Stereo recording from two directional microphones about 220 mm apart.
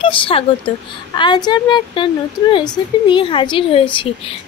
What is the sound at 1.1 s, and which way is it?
Speech, 20° left (ahead or behind).